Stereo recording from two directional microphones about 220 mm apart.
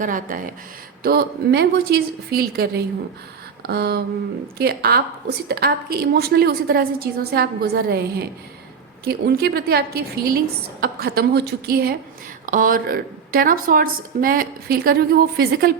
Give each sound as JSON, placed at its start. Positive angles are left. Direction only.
{"t": 0.0, "sound": "a woman's voice", "side_deg": -35}